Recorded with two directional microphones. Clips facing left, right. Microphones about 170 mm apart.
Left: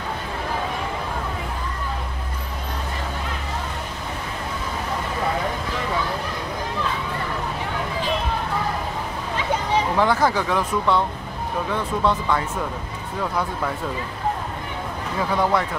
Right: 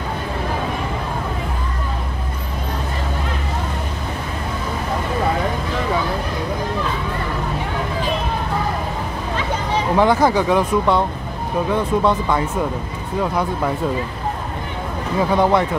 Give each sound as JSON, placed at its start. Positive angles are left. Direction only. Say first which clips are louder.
{"t": 9.9, "sound": "speech", "louder": "right 7 dB", "side_deg": -15}
{"t": 15.1, "sound": "speech", "louder": "right 5 dB", "side_deg": -20}